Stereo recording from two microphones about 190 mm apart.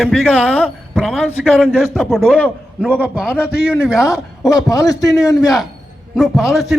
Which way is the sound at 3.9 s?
15° left (ahead or behind).